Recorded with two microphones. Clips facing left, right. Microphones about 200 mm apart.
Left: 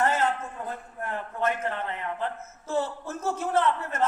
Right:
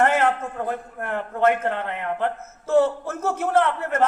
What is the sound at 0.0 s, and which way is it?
A man's voice, 65° right (ahead or behind).